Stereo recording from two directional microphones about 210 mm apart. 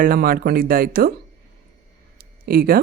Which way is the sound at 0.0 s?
45° right (ahead or behind).